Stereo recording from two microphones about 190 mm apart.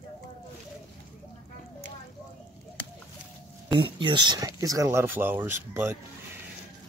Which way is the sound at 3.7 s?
25° right (ahead or behind).